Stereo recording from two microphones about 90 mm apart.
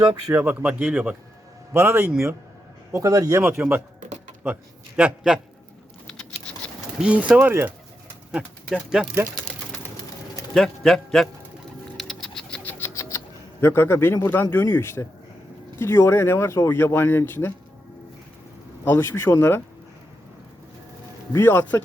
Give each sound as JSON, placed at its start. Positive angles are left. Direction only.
{"t": 0.3, "sound": "speech", "side_deg": -20}
{"t": 2.9, "sound": "speech", "side_deg": -40}
{"t": 3.6, "sound": "speech", "side_deg": -20}
{"t": 4.9, "sound": "speech", "side_deg": -10}
{"t": 7.0, "sound": "speech", "side_deg": -15}
{"t": 8.9, "sound": "speech", "side_deg": -5}
{"t": 10.5, "sound": "a man's voice", "side_deg": 5}
{"t": 11.9, "sound": "bird", "side_deg": 5}
{"t": 12.8, "sound": "a sound", "side_deg": 35}
{"t": 14.5, "sound": "speech", "side_deg": 25}
{"t": 18.9, "sound": "speech", "side_deg": 25}
{"t": 21.3, "sound": "speech", "side_deg": 25}